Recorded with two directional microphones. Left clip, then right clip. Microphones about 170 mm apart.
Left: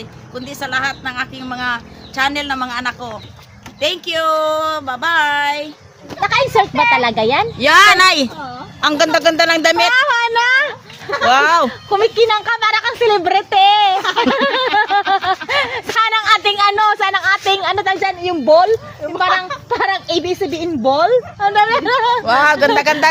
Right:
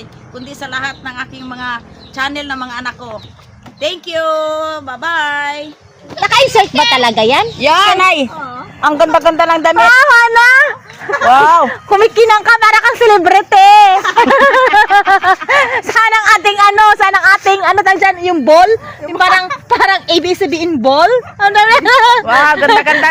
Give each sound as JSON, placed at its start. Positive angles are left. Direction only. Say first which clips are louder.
{"t": 0.3, "sound": "a woman's voice", "louder": "left 1 dB", "side_deg": 10}
{"t": 6.1, "sound": "a child's voice", "louder": "right 5 dB", "side_deg": -40}
{"t": 8.0, "sound": "speech", "louder": "right 2 dB", "side_deg": 45}
{"t": 8.8, "sound": "a man's voice", "louder": "right 4 dB", "side_deg": 5}
{"t": 9.7, "sound": "a sound", "louder": "right 8 dB", "side_deg": -45}
{"t": 11.3, "sound": "a woman's voice", "louder": "right 5 dB", "side_deg": 10}
{"t": 11.7, "sound": "a woman's voice", "louder": "right 6 dB", "side_deg": -60}
{"t": 22.2, "sound": "speech", "louder": "right 3 dB", "side_deg": -5}